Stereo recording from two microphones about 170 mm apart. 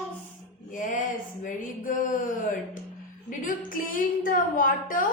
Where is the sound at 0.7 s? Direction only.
50° left (ahead or behind).